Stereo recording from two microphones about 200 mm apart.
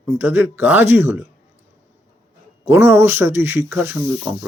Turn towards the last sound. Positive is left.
turn(degrees=-10)  # may be behind; listen again after turning